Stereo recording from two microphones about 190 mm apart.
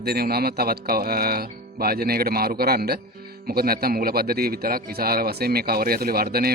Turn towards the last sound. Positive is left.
turn(degrees=-55)  # may be behind; listen again after turning